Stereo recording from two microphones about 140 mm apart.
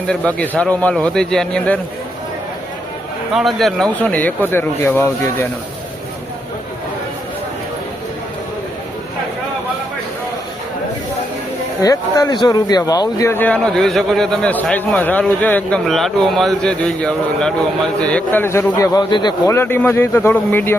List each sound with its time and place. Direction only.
0.1 s speech: 10° left (ahead or behind)
3.3 s speech: centre (ahead or behind); by 5.5 s 15° left (ahead or behind)
11.8 s speech: 25° left (ahead or behind)
18.9 s speech: 30° left (ahead or behind)
19.5 s speech: 15° left (ahead or behind)